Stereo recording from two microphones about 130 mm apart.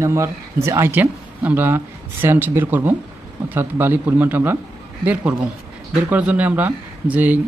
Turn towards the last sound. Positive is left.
turn(degrees=-15)  # may be behind; listen again after turning